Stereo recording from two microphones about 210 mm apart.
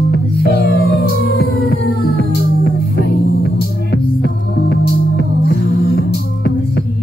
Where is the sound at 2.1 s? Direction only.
45° right (ahead or behind).